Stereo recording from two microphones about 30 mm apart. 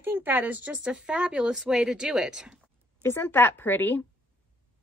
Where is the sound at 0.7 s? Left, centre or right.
Right.